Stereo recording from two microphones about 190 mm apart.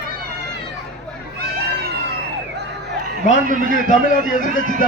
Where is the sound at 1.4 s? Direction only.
55° right (ahead or behind).